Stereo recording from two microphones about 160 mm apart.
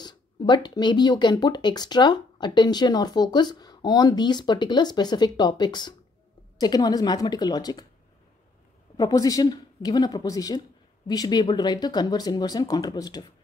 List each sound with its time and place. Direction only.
0.0 s speech: 25° left (ahead or behind)
8.9 s speech: 25° left (ahead or behind)